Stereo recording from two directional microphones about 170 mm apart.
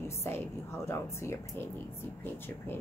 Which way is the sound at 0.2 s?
15° left (ahead or behind).